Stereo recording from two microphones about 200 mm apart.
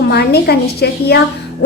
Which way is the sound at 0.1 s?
55° left (ahead or behind).